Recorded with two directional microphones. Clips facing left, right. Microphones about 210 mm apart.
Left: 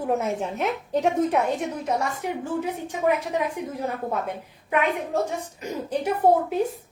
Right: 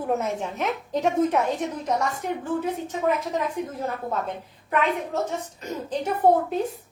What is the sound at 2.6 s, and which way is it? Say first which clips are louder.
A woman's voice: even; 10° left (ahead or behind).